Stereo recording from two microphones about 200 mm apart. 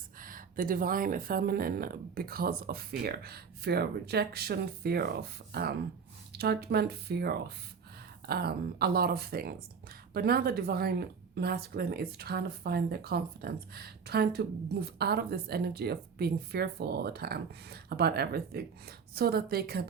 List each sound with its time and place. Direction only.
0.2 s speech: 45° right (ahead or behind)